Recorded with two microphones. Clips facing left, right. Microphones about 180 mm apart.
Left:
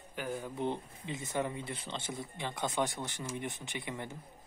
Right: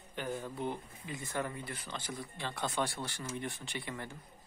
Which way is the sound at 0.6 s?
25° left (ahead or behind).